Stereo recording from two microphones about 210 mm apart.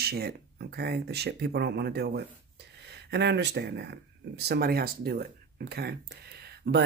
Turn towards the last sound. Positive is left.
turn(degrees=-50)  # may be behind; listen again after turning